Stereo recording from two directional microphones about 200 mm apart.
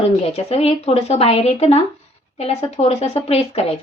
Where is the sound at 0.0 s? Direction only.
30° left (ahead or behind).